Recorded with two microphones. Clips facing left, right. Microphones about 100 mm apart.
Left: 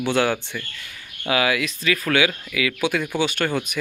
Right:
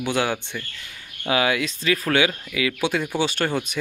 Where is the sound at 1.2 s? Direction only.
25° right (ahead or behind).